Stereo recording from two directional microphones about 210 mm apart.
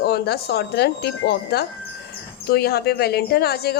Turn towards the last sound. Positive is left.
turn(degrees=50)  # may be behind; listen again after turning